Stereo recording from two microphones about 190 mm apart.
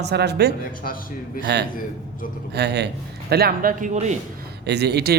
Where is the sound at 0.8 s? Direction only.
50° left (ahead or behind).